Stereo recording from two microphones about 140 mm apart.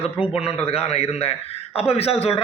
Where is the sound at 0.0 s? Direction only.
45° left (ahead or behind).